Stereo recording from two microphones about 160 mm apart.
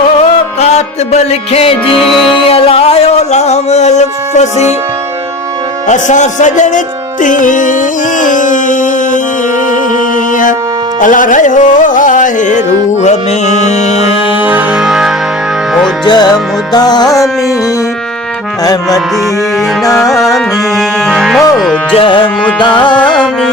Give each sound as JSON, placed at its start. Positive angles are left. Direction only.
{"t": 0.6, "sound": "music", "side_deg": 45}
{"t": 2.0, "sound": "music", "side_deg": 0}
{"t": 2.3, "sound": "music", "side_deg": 35}
{"t": 5.9, "sound": "speech", "side_deg": 50}
{"t": 11.0, "sound": "music", "side_deg": 55}
{"t": 14.4, "sound": "music", "side_deg": -10}
{"t": 16.0, "sound": "music", "side_deg": 25}
{"t": 18.6, "sound": "music", "side_deg": 25}
{"t": 19.9, "sound": "music", "side_deg": 0}
{"t": 21.9, "sound": "tabla", "side_deg": 35}
{"t": 22.6, "sound": "music", "side_deg": 30}
{"t": 23.0, "sound": "music", "side_deg": 5}